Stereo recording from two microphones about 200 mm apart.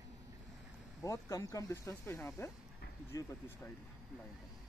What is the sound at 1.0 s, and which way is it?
Speech, 15° left (ahead or behind).